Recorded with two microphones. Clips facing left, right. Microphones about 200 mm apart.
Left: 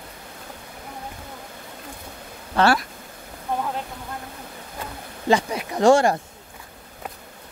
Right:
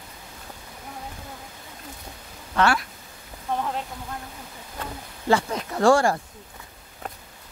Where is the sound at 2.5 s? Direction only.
35° left (ahead or behind).